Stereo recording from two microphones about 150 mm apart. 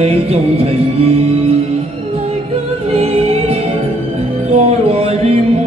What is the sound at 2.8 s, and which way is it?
Music, 45° right (ahead or behind).